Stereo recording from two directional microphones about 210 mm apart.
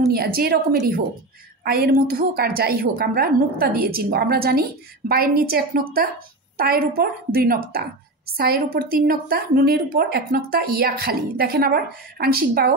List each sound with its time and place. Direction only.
0.1 s a woman's voice: 45° right (ahead or behind)